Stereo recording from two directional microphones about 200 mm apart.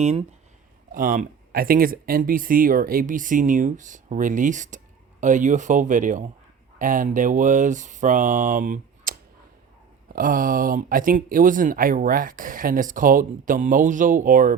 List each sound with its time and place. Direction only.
0.0 s speech: 30° right (ahead or behind)
0.9 s speech: 45° right (ahead or behind)